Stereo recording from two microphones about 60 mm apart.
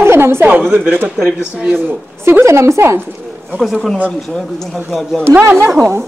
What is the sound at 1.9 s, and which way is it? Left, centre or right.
Speech, right.